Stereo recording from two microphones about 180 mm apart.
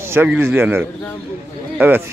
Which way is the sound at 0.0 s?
10° right (ahead or behind).